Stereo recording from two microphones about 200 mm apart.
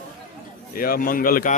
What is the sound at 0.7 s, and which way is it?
Speech, 45° left (ahead or behind).